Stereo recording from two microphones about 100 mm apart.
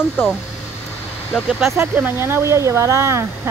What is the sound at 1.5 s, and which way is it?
Speech, 5° right (ahead or behind).